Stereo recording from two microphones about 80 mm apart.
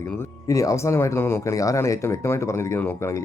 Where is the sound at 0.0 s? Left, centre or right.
Left.